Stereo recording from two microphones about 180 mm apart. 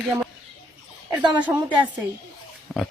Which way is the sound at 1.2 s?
25° right (ahead or behind).